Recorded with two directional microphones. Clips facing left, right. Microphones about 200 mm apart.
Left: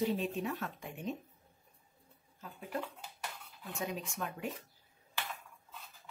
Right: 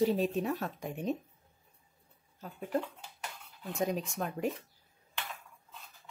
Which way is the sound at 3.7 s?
40° right (ahead or behind).